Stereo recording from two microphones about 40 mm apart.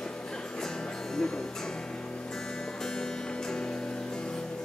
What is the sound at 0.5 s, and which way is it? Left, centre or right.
Music, centre.